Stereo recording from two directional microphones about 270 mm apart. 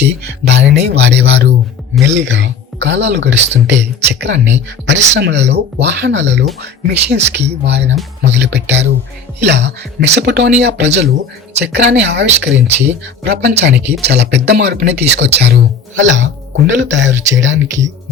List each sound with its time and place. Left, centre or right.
0.4 s a man's voice: right